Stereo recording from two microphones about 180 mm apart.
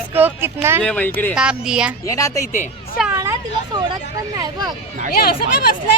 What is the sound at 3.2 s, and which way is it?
Speech, 20° right (ahead or behind).